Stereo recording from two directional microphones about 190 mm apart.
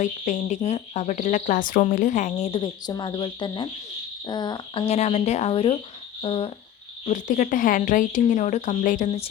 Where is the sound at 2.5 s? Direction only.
20° left (ahead or behind).